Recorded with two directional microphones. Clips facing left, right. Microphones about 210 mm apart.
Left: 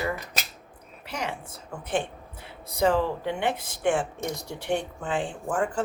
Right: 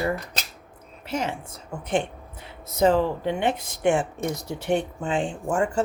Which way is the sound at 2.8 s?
20° right (ahead or behind).